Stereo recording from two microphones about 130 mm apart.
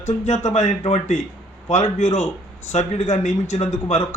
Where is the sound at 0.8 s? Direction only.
55° left (ahead or behind).